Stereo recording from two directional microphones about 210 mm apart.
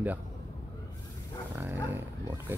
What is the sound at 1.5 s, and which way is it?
Roaring cats, 10° right (ahead or behind).